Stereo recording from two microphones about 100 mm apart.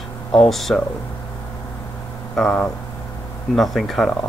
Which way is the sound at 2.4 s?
5° left (ahead or behind).